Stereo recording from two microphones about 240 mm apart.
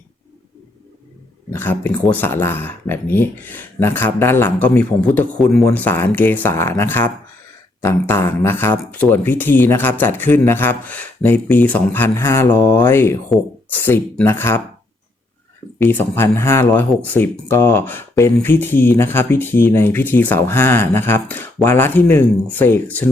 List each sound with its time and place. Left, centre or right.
1.5 s speech: centre
15.8 s speech: centre